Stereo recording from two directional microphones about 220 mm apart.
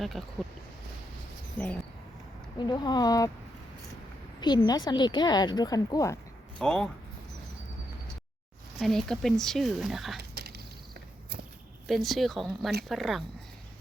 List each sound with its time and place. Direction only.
0.0 s speech: centre (ahead or behind)
1.6 s speech: 10° left (ahead or behind)
2.6 s a woman's voice: 20° left (ahead or behind)
4.4 s a woman's voice: 20° left (ahead or behind)
6.6 s speech: 5° left (ahead or behind)
8.8 s speech: centre (ahead or behind)
10.2 s a sound: 45° right (ahead or behind)
11.9 s speech: centre (ahead or behind)